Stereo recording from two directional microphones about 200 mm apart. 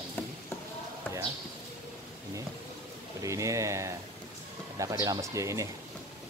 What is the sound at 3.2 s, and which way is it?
Speech, 15° right (ahead or behind).